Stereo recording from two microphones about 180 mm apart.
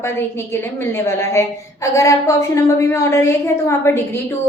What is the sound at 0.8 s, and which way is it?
A woman's voice, 15° left (ahead or behind).